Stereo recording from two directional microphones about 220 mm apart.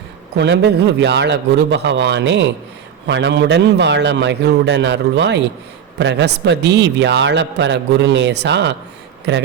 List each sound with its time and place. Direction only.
0.3 s a man's voice: 50° right (ahead or behind)